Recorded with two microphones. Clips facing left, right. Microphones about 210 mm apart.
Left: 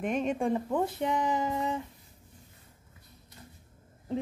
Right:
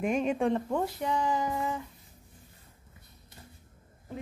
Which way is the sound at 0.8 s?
20° left (ahead or behind).